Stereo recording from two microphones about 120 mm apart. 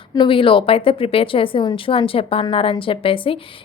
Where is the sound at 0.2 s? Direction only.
45° left (ahead or behind).